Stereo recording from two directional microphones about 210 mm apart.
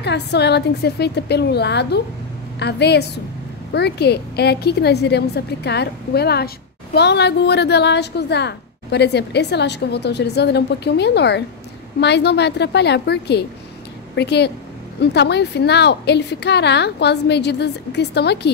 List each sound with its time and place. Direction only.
0.0 s a woman's voice: 55° left (ahead or behind)